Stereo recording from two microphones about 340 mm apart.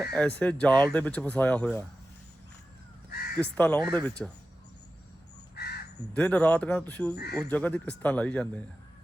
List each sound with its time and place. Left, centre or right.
0.0 s speech: centre
3.1 s crow: left
3.3 s speech: centre
5.5 s crow: left
6.1 s speech: centre